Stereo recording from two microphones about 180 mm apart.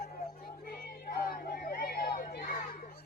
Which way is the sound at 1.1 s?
55° left (ahead or behind).